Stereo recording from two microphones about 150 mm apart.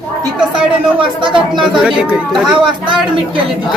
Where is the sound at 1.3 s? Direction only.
30° right (ahead or behind).